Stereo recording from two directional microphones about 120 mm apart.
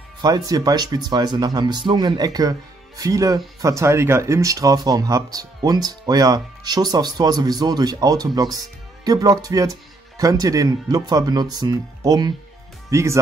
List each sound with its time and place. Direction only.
0.2 s speech: 30° right (ahead or behind)